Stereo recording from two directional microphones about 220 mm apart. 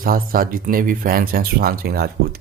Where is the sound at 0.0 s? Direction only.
40° right (ahead or behind).